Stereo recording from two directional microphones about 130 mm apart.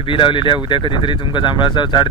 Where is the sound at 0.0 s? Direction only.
40° left (ahead or behind).